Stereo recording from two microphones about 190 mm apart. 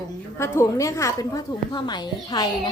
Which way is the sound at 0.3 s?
15° left (ahead or behind).